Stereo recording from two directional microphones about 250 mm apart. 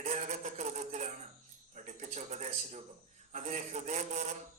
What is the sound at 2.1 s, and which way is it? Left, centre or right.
Speech, right.